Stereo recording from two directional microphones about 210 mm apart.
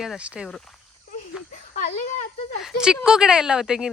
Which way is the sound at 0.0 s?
5° right (ahead or behind).